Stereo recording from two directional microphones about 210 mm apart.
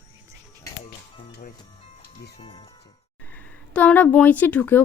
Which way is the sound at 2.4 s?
25° left (ahead or behind).